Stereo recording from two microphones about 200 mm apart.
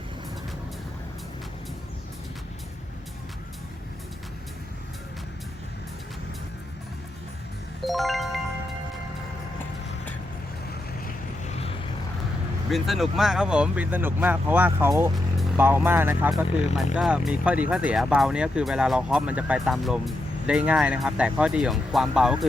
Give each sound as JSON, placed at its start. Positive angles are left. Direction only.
{"t": 7.9, "sound": "music", "side_deg": 0}
{"t": 11.0, "sound": "boat", "side_deg": 35}
{"t": 12.7, "sound": "speech", "side_deg": 0}